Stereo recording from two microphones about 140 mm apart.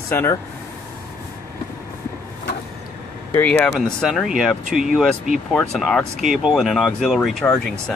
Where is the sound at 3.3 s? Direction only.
15° left (ahead or behind).